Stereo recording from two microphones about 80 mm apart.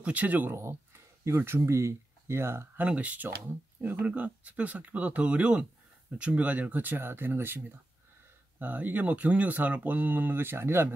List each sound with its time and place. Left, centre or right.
0.0 s speech: centre
0.6 s speech: right
2.8 s speech: centre